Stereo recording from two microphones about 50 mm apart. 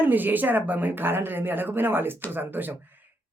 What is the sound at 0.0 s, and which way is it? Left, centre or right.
Speech, right.